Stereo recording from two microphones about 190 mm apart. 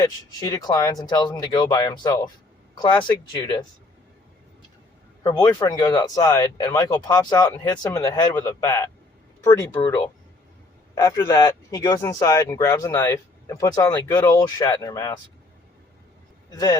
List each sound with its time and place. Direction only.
0.0 s speech: 20° left (ahead or behind)
5.2 s speech: 25° left (ahead or behind)
10.9 s speech: 15° left (ahead or behind)
16.5 s speech: 20° left (ahead or behind)